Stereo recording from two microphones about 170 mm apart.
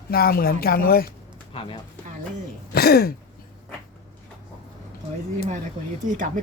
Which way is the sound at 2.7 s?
65° left (ahead or behind).